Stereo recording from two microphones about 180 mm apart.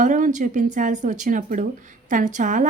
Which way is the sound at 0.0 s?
45° right (ahead or behind).